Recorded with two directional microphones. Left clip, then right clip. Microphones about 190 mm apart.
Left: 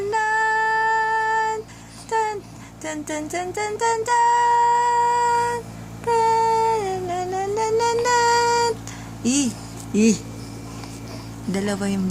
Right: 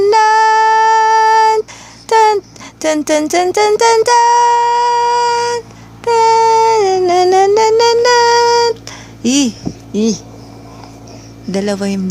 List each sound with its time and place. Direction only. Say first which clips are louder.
0.1 s child singing: right 9 dB; 45° right (ahead or behind)
2.0 s a sound: right 14 dB; 45° right (ahead or behind)
2.8 s child singing: right 16 dB; 45° right (ahead or behind)
6.1 s a sound: right 9 dB; 40° right (ahead or behind)
9.2 s speech: right 9 dB; 30° right (ahead or behind)
11.5 s speech: right 9 dB; 25° right (ahead or behind)